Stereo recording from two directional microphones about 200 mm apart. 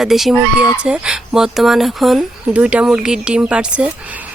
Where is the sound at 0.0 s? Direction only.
Centre (ahead or behind).